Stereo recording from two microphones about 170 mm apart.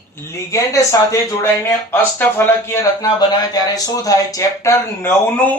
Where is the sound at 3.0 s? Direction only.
25° left (ahead or behind).